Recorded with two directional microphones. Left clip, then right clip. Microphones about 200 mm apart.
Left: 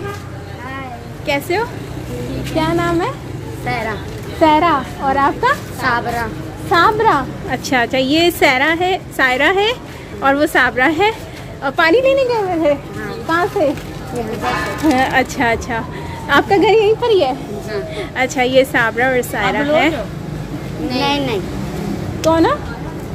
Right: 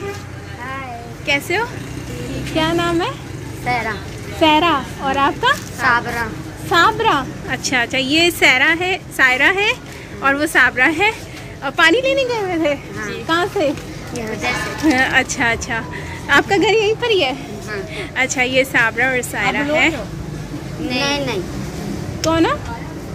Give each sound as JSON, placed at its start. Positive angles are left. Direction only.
{"t": 1.2, "sound": "a woman's voice", "side_deg": 10}
{"t": 3.6, "sound": "speech", "side_deg": -15}
{"t": 4.4, "sound": "a woman's voice", "side_deg": 10}
{"t": 5.8, "sound": "speech", "side_deg": -5}
{"t": 6.7, "sound": "a woman's voice", "side_deg": 15}
{"t": 14.9, "sound": "a woman's voice", "side_deg": 15}
{"t": 20.9, "sound": "speech", "side_deg": -15}